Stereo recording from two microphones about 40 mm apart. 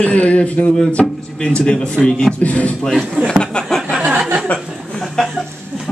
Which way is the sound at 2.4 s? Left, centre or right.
Left.